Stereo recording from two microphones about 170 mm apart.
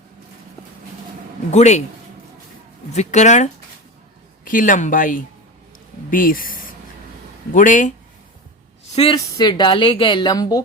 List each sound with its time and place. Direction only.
1.5 s a man's voice: 40° left (ahead or behind)
2.9 s speech: 45° left (ahead or behind)
9.0 s speech: 25° left (ahead or behind)